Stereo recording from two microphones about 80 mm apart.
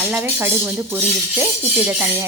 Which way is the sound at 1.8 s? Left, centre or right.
Centre.